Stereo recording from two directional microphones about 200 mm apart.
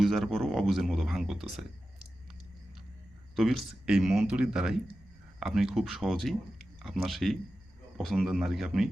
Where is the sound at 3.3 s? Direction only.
Centre (ahead or behind).